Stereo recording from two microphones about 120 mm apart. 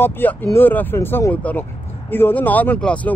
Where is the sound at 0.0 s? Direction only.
15° left (ahead or behind).